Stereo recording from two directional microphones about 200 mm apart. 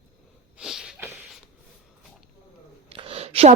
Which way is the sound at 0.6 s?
5° right (ahead or behind).